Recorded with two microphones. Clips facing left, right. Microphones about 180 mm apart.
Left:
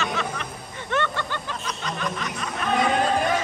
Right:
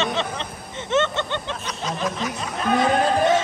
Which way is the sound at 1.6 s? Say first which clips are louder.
Right 1 dB; centre (ahead or behind).